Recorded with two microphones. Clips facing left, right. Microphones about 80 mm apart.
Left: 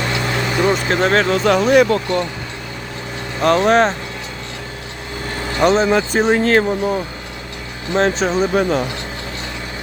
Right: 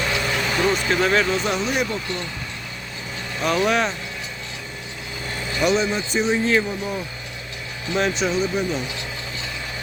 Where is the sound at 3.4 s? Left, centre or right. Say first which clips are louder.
Left 7 dB; left.